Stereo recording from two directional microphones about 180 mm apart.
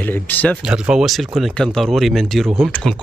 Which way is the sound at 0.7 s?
5° right (ahead or behind).